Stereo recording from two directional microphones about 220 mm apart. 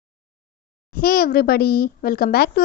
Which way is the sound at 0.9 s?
40° left (ahead or behind).